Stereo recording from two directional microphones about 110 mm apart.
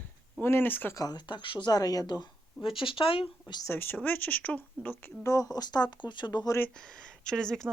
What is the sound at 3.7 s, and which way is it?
Speech, 15° left (ahead or behind).